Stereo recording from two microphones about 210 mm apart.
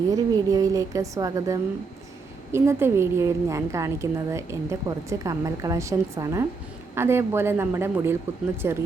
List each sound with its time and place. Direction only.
0.1 s a woman's voice: 15° right (ahead or behind)